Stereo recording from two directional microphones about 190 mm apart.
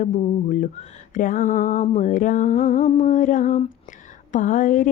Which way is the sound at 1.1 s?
45° left (ahead or behind).